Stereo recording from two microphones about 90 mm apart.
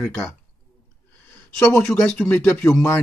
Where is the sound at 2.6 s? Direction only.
30° left (ahead or behind).